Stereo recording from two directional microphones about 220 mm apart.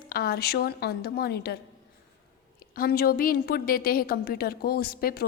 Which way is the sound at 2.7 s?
40° left (ahead or behind).